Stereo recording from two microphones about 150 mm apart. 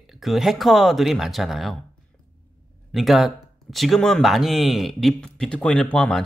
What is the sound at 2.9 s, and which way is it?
Speech, centre (ahead or behind).